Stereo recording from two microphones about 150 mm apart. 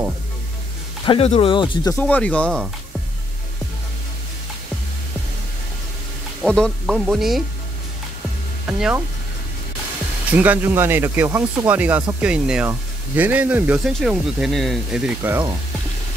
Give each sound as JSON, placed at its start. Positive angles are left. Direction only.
{"t": 1.0, "sound": "speech", "side_deg": 40}
{"t": 1.9, "sound": "speech", "side_deg": 10}
{"t": 6.4, "sound": "speech", "side_deg": 5}
{"t": 8.6, "sound": "speech", "side_deg": -5}
{"t": 10.3, "sound": "speech", "side_deg": -10}